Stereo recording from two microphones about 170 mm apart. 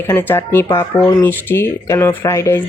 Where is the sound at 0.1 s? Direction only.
15° left (ahead or behind).